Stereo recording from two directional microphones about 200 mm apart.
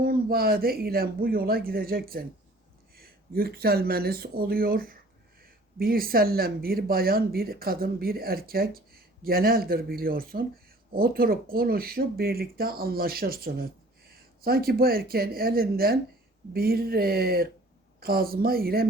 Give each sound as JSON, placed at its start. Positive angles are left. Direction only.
{"t": 0.0, "sound": "speech", "side_deg": -50}